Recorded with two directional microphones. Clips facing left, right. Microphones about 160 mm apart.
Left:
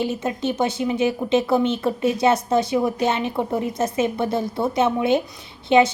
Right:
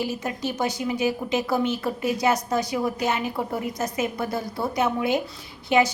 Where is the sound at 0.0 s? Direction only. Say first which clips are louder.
Left 4 dB; 25° left (ahead or behind).